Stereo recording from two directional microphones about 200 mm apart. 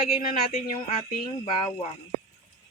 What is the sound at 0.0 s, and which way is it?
Speech, 45° left (ahead or behind).